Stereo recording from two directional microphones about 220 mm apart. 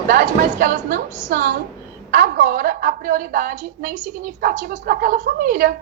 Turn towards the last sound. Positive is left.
turn(degrees=-45)  # may be behind; listen again after turning